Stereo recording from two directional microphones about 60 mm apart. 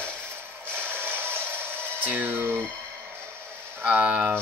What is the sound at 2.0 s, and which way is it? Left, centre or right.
Speech, right.